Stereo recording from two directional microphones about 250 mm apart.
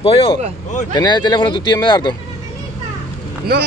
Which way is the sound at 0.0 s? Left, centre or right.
Left.